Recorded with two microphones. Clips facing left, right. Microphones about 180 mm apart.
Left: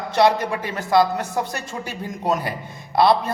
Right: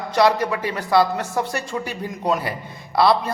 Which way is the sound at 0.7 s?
20° left (ahead or behind).